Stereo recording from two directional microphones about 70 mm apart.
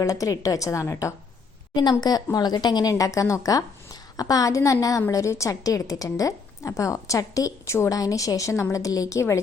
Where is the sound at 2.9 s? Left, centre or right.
Left.